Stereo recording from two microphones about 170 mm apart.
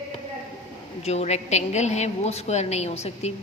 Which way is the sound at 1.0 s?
40° left (ahead or behind).